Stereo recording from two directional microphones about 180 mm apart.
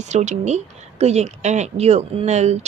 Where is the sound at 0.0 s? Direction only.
40° right (ahead or behind).